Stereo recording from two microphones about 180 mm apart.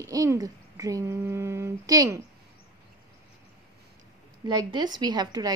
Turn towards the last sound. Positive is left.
turn(degrees=-20)  # may be behind; listen again after turning